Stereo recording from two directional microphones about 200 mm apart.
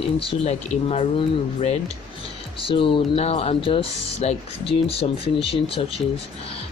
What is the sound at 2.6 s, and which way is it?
Speech, 25° left (ahead or behind).